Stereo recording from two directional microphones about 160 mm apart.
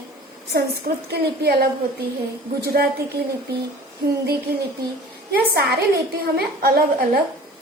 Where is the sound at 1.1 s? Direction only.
90° right.